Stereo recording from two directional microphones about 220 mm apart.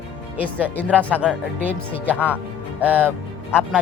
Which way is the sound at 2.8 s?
5° right (ahead or behind).